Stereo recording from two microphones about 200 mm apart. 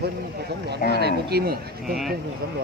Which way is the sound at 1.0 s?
50° right (ahead or behind).